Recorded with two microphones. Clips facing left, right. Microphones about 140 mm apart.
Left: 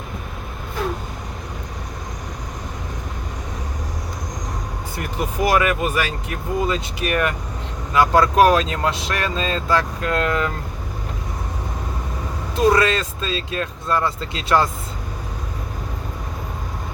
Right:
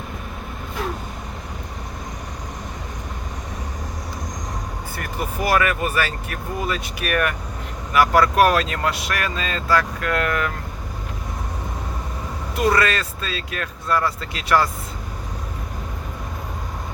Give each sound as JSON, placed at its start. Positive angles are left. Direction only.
{"t": 4.9, "sound": "speech", "side_deg": 20}
{"t": 12.5, "sound": "speech", "side_deg": 20}